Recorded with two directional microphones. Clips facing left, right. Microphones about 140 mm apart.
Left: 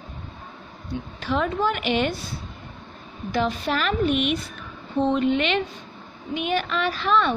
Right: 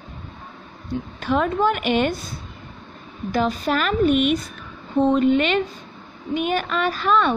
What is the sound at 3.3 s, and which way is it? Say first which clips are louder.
A woman's voice: right 3 dB; 45° right (ahead or behind).